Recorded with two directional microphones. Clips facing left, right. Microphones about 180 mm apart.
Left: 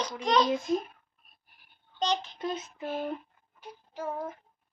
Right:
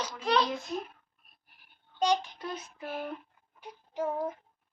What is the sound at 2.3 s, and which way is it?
Speech, 20° left (ahead or behind).